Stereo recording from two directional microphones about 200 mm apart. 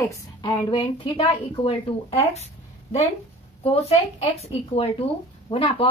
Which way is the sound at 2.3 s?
30° left (ahead or behind).